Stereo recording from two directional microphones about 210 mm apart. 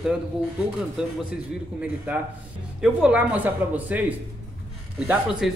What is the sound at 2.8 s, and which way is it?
A man's voice, 5° right (ahead or behind).